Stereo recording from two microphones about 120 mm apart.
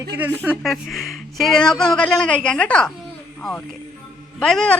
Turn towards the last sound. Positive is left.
turn(degrees=5)  # may be behind; listen again after turning